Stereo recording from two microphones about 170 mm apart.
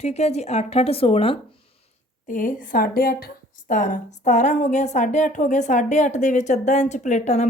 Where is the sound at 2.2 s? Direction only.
50° left (ahead or behind).